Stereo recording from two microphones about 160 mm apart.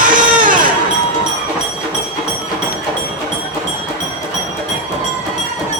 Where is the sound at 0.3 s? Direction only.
55° right (ahead or behind).